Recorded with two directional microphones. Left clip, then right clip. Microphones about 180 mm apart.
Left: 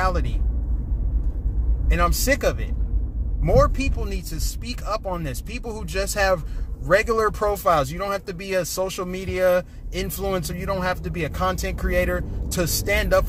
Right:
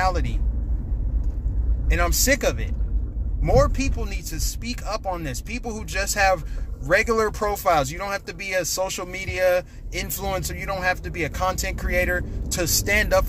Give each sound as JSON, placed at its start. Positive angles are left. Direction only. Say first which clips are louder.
{"t": 0.0, "sound": "vehicle", "louder": "right 1 dB", "side_deg": 10}
{"t": 1.9, "sound": "speech", "louder": "even", "side_deg": 15}